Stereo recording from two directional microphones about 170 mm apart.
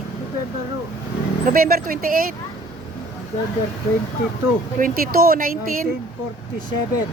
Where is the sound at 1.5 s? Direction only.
60° right (ahead or behind).